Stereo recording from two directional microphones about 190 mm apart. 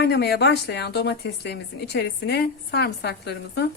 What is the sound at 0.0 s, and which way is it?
Speech, 60° left (ahead or behind).